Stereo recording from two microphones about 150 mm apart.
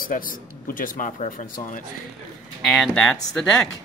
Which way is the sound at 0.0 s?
65° left (ahead or behind).